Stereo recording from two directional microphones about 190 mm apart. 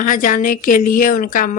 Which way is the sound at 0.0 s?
45° left (ahead or behind).